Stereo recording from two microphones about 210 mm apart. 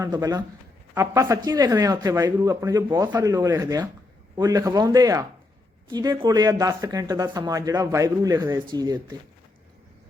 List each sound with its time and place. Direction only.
0.0 s speech: 15° right (ahead or behind)